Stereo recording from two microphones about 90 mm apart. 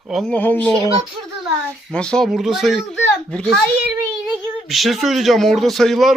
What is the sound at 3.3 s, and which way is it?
Speech, 10° left (ahead or behind).